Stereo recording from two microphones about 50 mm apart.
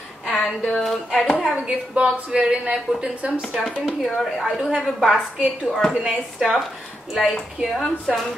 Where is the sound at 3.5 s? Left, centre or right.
Centre.